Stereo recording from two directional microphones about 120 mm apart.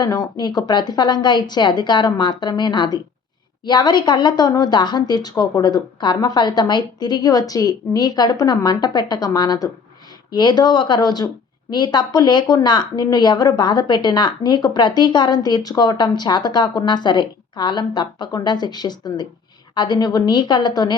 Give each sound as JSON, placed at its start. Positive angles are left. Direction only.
{"t": 0.0, "sound": "speech", "side_deg": 30}